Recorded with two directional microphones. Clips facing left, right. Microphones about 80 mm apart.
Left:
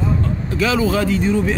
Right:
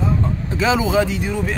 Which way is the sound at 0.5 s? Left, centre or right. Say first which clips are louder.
Right 1 dB; right.